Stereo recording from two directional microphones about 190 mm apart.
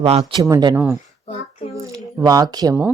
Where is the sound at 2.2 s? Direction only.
20° right (ahead or behind).